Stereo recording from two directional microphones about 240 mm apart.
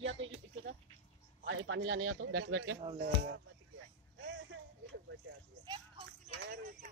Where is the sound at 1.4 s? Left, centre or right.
Right.